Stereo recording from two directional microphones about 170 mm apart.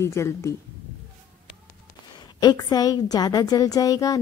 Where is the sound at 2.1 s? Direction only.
25° left (ahead or behind).